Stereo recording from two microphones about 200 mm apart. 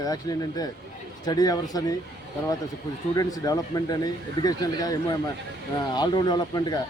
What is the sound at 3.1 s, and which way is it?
A man's voice, 20° left (ahead or behind).